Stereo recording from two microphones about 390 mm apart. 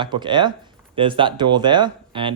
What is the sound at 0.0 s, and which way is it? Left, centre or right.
Speech, centre.